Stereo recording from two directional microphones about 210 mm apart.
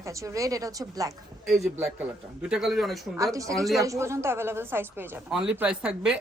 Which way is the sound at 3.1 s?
15° right (ahead or behind).